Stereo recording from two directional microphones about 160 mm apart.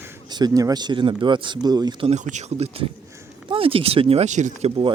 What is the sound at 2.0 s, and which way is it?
Speech, 45° right (ahead or behind).